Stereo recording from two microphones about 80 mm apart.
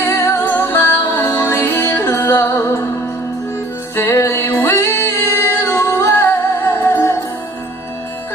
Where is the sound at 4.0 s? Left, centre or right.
Left.